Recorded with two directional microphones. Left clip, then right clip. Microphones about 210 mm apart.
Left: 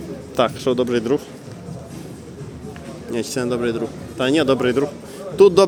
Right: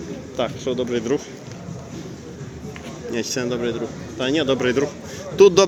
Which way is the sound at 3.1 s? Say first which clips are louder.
Left 2 dB; 15° left (ahead or behind).